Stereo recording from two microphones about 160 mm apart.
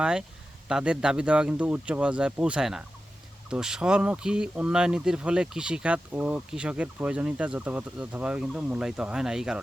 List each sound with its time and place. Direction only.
0.0 s speech: 5° right (ahead or behind)